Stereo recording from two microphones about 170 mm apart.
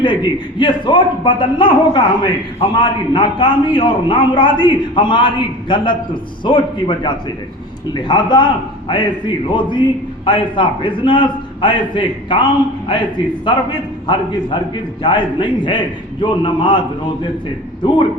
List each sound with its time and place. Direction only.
0.0 s a man's voice: 30° left (ahead or behind)
13.5 s a man's voice: 30° left (ahead or behind)
15.0 s a man's voice: 30° left (ahead or behind)
17.8 s a man's voice: 30° left (ahead or behind)